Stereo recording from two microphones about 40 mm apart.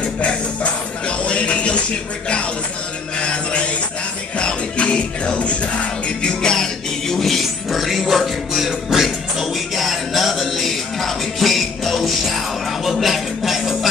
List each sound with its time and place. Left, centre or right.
0.0 s music: left
3.2 s music: left; by 13.7 s centre